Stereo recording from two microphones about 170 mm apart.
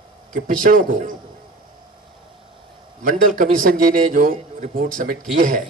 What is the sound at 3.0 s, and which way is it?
A man's voice, 55° right (ahead or behind).